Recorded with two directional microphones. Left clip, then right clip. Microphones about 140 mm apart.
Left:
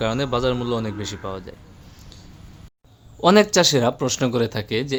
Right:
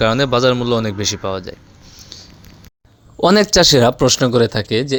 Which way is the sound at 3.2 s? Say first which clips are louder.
Right 4 dB; 45° right (ahead or behind).